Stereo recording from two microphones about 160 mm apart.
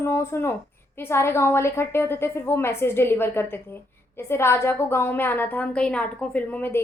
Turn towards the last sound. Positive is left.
turn(degrees=10)  # may be behind; listen again after turning